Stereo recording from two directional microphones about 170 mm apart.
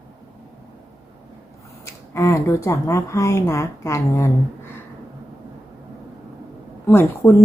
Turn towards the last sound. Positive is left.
turn(degrees=15)  # may be behind; listen again after turning